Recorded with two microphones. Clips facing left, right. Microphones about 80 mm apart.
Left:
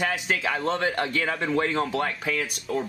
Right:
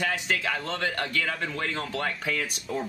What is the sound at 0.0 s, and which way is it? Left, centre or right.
A man's voice, centre.